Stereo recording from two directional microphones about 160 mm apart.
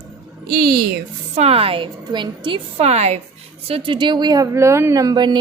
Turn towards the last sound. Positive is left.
turn(degrees=-25)  # may be behind; listen again after turning